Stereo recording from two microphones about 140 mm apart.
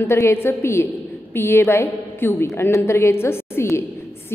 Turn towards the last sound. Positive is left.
turn(degrees=15)  # may be behind; listen again after turning